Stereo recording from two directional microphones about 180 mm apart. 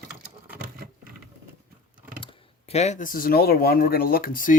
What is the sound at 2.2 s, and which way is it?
Speech, 30° left (ahead or behind).